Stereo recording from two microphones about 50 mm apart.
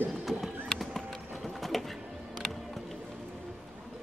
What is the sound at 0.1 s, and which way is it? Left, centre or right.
Horse, centre.